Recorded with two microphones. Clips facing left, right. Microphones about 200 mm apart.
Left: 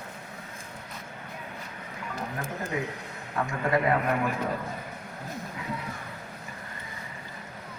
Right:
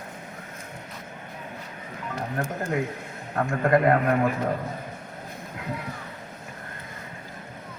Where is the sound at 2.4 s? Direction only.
60° right (ahead or behind).